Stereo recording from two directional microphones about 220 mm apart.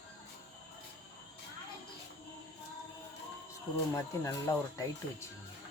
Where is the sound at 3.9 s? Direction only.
15° left (ahead or behind).